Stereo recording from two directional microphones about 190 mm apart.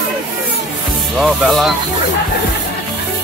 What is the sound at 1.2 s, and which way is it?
Music, centre (ahead or behind).